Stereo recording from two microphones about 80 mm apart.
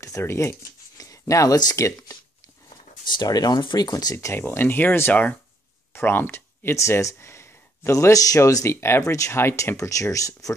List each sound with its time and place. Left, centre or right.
0.0 s speech: left
0.9 s speech: left
3.1 s speech: left
4.3 s speech: left